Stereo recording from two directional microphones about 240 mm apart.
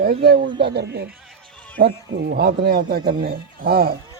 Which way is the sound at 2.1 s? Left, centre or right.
Right.